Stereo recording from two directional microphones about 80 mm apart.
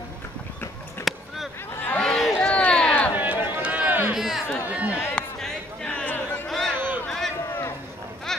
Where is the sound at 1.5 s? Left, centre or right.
Left.